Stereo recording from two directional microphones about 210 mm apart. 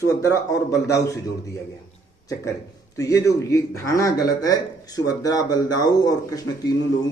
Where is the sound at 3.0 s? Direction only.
15° left (ahead or behind).